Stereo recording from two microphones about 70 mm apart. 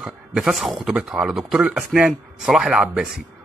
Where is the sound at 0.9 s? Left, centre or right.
Centre.